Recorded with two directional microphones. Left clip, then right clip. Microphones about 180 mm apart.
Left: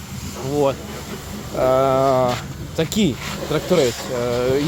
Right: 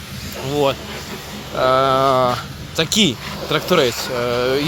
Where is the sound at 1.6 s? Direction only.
10° left (ahead or behind).